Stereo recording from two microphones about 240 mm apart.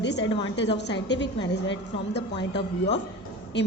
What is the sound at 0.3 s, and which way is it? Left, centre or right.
Speech, left.